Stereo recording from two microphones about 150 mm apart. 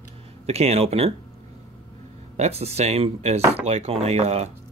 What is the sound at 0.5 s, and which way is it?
Speech, 45° right (ahead or behind).